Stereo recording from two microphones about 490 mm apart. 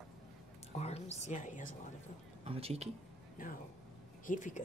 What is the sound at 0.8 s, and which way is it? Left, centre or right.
Speech, centre.